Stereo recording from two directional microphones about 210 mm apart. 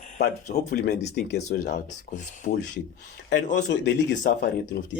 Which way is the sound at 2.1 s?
35° left (ahead or behind).